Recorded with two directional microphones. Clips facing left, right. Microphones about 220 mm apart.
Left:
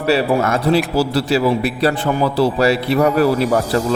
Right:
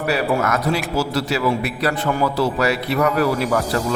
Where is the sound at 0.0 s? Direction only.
30° left (ahead or behind).